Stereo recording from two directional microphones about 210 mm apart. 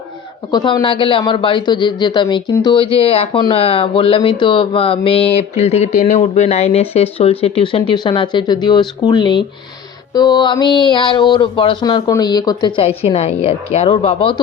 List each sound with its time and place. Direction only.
0.5 s speech: 20° left (ahead or behind)